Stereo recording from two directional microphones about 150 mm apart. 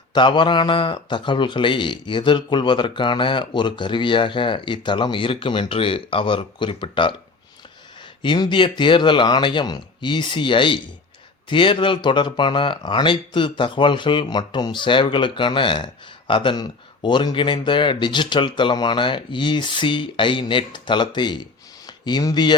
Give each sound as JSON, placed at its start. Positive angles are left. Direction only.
{"t": 0.1, "sound": "speech", "side_deg": 30}
{"t": 8.2, "sound": "speech", "side_deg": 30}